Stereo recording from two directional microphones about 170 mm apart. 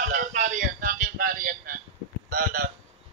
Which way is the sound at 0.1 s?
50° right (ahead or behind).